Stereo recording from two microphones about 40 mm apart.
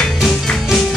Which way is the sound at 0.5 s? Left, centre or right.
Centre.